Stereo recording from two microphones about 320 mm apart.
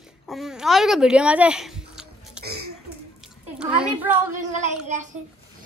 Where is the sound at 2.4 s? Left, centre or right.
Right.